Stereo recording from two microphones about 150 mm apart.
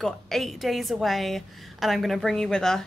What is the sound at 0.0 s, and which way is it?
A woman's voice, centre (ahead or behind).